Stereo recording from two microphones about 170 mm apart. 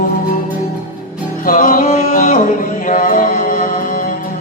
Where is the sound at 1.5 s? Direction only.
50° left (ahead or behind).